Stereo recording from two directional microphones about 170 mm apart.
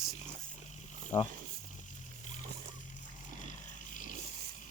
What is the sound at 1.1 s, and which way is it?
Speech, 15° left (ahead or behind).